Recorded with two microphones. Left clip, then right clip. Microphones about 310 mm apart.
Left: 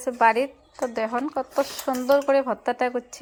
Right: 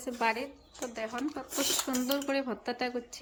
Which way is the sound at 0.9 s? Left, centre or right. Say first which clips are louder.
Left 10 dB; left.